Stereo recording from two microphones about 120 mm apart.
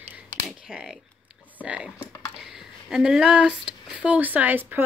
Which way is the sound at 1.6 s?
10° right (ahead or behind).